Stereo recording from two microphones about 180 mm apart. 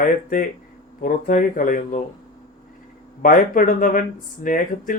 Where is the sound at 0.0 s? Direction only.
50° left (ahead or behind).